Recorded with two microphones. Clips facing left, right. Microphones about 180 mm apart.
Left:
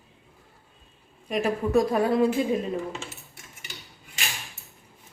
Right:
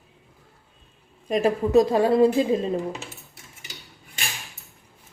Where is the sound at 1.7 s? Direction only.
25° right (ahead or behind).